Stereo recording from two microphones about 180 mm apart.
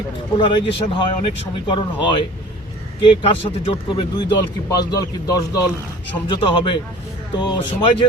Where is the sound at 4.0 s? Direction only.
25° left (ahead or behind).